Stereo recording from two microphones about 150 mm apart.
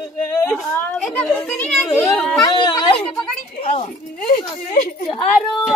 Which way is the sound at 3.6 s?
50° left (ahead or behind).